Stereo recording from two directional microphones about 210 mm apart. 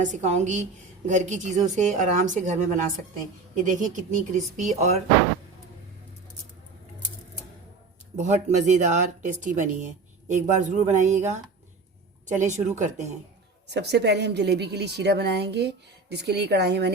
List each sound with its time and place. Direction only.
0.0 s speech: 35° right (ahead or behind)
8.1 s speech: 35° right (ahead or behind)
13.7 s a woman's voice: 55° right (ahead or behind)